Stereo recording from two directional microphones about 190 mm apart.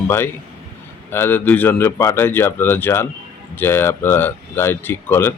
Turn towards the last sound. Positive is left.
turn(degrees=10)  # may be behind; listen again after turning